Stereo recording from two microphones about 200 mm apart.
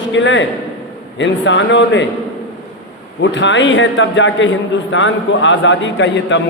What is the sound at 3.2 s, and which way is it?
A man's voice, 65° left (ahead or behind).